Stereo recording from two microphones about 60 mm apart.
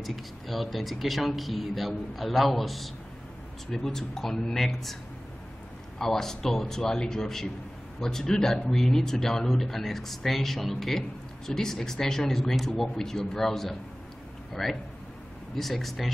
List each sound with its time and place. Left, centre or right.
0.0 s speech: centre
5.9 s speech: centre